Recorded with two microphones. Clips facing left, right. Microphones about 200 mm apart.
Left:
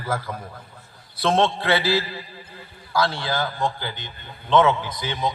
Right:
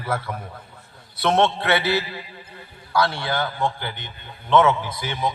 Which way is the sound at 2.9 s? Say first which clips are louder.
Right 1 dB; 25° left (ahead or behind).